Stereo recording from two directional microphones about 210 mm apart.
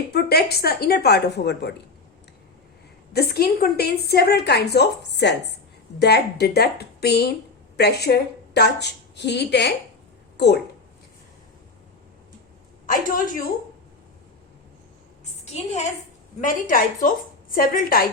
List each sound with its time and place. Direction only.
0.1 s a woman's voice: 50° left (ahead or behind)
3.1 s a woman's voice: 50° left (ahead or behind)
12.8 s a woman's voice: 40° left (ahead or behind)
15.2 s a sound: 30° left (ahead or behind)
16.4 s a woman's voice: 40° left (ahead or behind)